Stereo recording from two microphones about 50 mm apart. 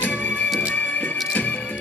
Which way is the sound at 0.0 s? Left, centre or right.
Left.